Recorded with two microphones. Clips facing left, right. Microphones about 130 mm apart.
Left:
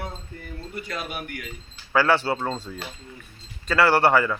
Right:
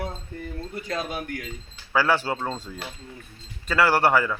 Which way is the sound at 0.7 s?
30° right (ahead or behind).